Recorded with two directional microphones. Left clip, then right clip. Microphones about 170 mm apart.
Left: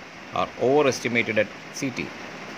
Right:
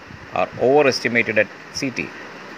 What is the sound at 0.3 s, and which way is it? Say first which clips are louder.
Speech: right 5 dB; 25° right (ahead or behind).